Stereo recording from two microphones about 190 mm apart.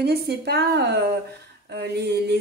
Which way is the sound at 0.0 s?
60° right (ahead or behind).